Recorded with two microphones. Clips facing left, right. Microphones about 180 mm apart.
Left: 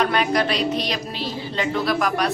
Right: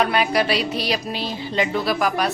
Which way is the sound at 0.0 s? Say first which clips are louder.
Right 1 dB; 10° right (ahead or behind).